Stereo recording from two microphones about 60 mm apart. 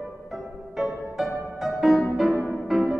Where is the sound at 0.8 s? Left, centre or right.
Centre.